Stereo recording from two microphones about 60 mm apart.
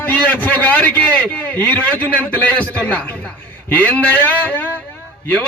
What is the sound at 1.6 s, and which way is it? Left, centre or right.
A man's voice, left.